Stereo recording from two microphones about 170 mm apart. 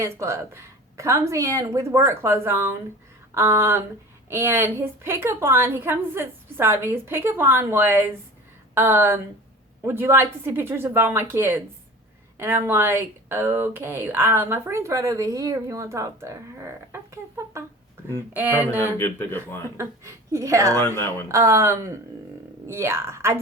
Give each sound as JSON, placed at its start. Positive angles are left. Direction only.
{"t": 0.0, "sound": "speech", "side_deg": -15}
{"t": 18.9, "sound": "speech", "side_deg": 15}
{"t": 19.7, "sound": "speech", "side_deg": -15}
{"t": 20.7, "sound": "speech", "side_deg": 15}
{"t": 21.2, "sound": "speech", "side_deg": -15}